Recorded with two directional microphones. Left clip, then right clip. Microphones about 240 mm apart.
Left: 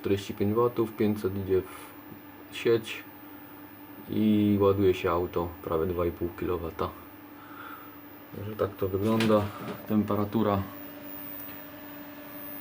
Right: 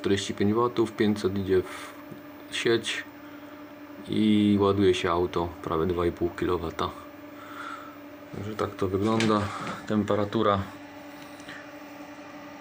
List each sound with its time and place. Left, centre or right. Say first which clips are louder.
0.0 s speech: right 3 dB; centre
4.1 s speech: right 2 dB; centre
8.5 s speech: right 1 dB; right
9.9 s speech: right 2 dB; centre